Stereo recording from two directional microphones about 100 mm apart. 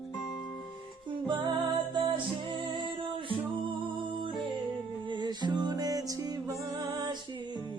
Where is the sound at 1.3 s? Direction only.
55° right (ahead or behind).